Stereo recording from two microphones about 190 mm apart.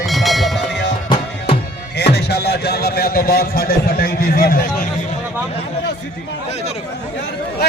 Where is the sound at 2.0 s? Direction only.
60° left (ahead or behind).